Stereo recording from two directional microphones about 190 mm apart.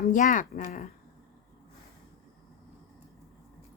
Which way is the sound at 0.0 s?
45° left (ahead or behind).